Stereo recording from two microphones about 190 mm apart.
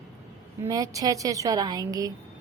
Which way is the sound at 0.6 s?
20° right (ahead or behind).